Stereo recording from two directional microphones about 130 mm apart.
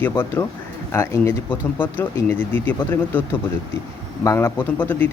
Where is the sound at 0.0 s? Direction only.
15° left (ahead or behind).